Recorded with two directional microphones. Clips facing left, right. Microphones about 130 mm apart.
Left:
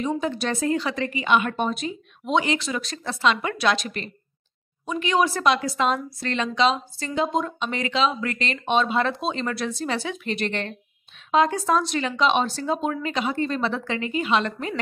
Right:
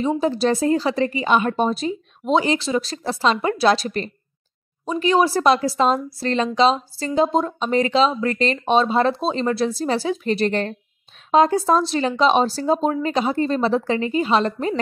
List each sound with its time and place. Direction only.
0.0 s a woman's voice: 30° right (ahead or behind)